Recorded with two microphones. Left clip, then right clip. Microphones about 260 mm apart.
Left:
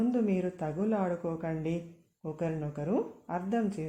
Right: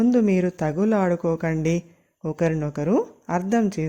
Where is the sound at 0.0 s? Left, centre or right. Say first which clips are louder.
Right 10 dB; right.